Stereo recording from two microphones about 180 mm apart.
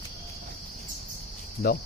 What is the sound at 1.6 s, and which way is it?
Speech, 60° left (ahead or behind).